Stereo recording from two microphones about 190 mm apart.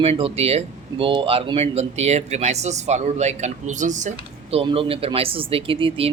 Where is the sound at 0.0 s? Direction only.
30° right (ahead or behind).